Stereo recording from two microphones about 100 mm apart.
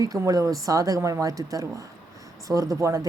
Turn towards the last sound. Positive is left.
turn(degrees=-30)  # may be behind; listen again after turning